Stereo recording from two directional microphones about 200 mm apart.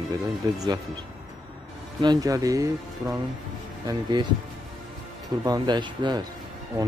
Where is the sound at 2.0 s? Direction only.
20° right (ahead or behind).